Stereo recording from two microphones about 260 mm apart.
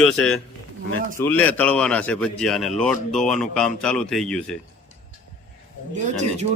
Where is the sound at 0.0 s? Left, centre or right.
Centre.